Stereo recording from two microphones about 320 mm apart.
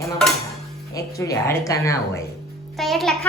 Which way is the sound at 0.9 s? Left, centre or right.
Centre.